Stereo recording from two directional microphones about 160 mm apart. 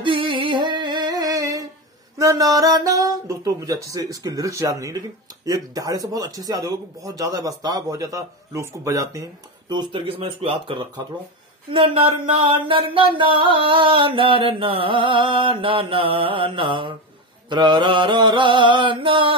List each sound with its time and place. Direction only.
0.0 s music: 35° right (ahead or behind)
2.1 s speech: 20° right (ahead or behind)
11.7 s a sound: 35° right (ahead or behind)